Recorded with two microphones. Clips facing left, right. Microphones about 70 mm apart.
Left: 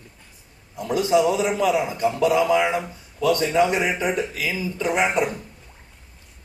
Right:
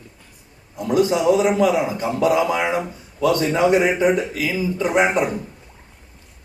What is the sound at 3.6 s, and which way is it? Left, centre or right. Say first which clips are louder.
A man's voice: right 7 dB; right.